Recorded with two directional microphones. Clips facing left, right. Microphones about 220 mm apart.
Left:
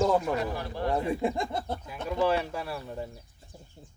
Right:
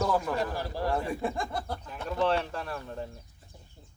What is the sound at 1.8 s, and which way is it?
Speech, 10° left (ahead or behind).